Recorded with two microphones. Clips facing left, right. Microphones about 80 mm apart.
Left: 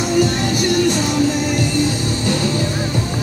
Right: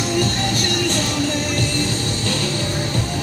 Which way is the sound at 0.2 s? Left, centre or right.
Centre.